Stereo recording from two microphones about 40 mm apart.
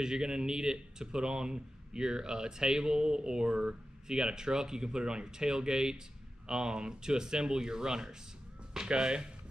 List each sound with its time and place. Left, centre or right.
0.0 s speech: centre